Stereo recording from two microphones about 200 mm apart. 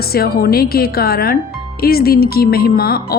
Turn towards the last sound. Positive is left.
turn(degrees=50)  # may be behind; listen again after turning